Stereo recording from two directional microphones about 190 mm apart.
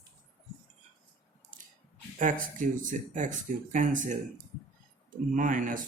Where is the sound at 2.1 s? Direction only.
45° right (ahead or behind).